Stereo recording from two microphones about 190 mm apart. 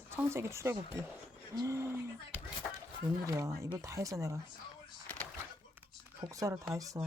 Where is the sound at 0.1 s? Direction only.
15° right (ahead or behind).